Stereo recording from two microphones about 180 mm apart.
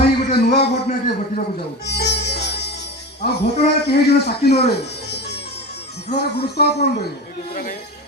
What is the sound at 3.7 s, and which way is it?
Speech, 65° left (ahead or behind).